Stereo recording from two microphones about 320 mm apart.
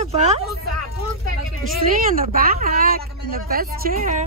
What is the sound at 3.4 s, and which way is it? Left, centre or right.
Speech, right.